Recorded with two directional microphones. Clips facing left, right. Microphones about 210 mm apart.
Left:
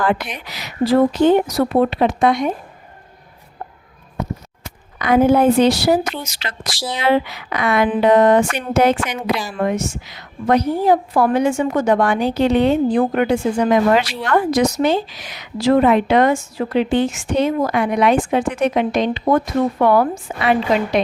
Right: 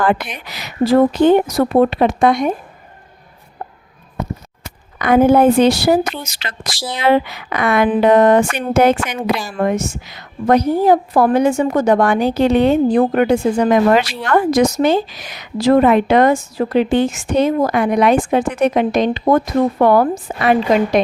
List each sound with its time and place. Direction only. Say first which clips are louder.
0.0 s a woman's voice: right 2 dB; 55° right (ahead or behind)
4.9 s a woman's voice: right 2 dB; 50° right (ahead or behind)